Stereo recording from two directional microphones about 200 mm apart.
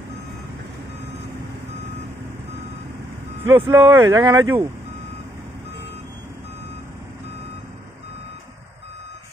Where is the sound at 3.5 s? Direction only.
20° right (ahead or behind).